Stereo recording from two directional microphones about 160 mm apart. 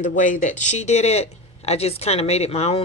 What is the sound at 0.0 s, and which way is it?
Speech, 50° left (ahead or behind).